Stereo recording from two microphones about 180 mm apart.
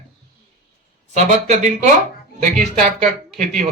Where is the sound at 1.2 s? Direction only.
40° right (ahead or behind).